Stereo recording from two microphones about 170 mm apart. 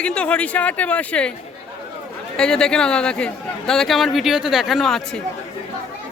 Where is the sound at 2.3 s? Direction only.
5° left (ahead or behind).